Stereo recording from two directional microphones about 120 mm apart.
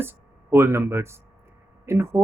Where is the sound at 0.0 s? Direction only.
20° right (ahead or behind).